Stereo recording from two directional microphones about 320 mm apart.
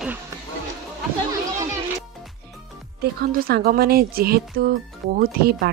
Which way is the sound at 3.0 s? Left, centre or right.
Right.